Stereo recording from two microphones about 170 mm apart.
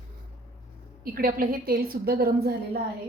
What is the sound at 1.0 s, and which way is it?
A woman's voice, 60° right (ahead or behind).